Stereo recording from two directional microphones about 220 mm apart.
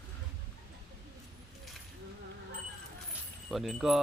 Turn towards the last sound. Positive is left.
turn(degrees=0)  # may be behind; listen again after turning